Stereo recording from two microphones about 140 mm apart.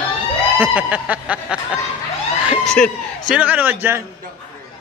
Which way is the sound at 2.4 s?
5° left (ahead or behind).